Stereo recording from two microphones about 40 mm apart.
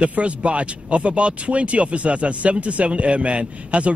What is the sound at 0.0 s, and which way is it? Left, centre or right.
Speech, right.